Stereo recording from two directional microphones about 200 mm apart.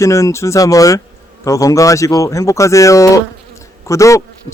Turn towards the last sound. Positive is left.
turn(degrees=15)  # may be behind; listen again after turning